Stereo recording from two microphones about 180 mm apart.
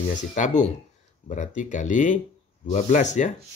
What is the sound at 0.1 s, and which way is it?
Speech, 45° left (ahead or behind).